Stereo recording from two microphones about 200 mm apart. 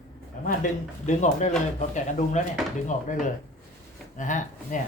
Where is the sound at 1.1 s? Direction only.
35° left (ahead or behind).